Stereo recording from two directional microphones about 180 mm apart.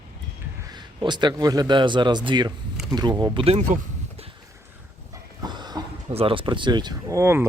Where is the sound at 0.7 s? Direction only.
25° right (ahead or behind).